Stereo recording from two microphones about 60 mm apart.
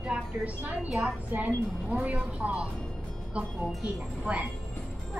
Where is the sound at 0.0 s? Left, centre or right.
Right.